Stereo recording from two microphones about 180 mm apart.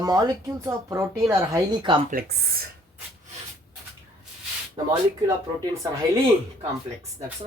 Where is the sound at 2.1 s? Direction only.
55° right (ahead or behind).